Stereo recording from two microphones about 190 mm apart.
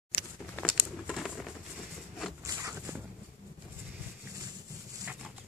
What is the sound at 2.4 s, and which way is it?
Zipper, 15° right (ahead or behind).